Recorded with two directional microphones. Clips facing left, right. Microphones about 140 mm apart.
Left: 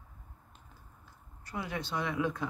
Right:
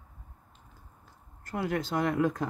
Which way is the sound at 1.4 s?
50° right (ahead or behind).